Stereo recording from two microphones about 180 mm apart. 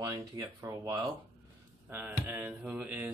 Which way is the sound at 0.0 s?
20° right (ahead or behind).